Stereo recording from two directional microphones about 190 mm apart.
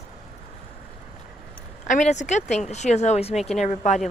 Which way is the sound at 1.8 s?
40° left (ahead or behind).